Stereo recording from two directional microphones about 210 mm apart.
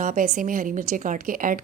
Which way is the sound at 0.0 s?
40° right (ahead or behind).